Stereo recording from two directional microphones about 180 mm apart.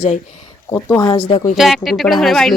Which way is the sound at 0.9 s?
15° left (ahead or behind).